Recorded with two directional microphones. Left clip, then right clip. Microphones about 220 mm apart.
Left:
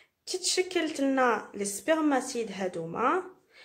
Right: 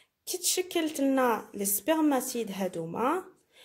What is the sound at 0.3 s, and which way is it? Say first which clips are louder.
A woman's voice: left 2 dB; 35° right (ahead or behind).